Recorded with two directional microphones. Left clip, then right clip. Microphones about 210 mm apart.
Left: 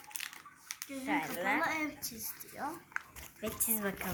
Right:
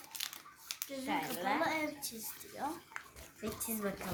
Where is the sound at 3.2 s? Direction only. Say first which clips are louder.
Left 3 dB; 50° left (ahead or behind).